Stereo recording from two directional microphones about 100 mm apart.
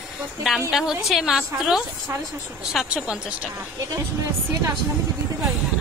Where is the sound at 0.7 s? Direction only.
5° right (ahead or behind).